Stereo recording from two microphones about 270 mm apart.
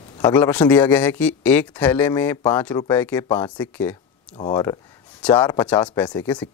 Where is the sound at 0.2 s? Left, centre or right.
Centre.